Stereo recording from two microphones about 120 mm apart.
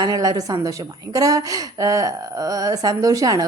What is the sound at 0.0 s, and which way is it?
Speech, 30° right (ahead or behind).